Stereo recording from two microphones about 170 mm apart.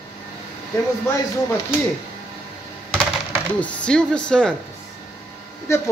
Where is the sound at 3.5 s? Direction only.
5° left (ahead or behind).